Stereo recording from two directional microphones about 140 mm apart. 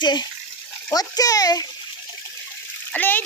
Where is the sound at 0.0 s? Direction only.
30° left (ahead or behind).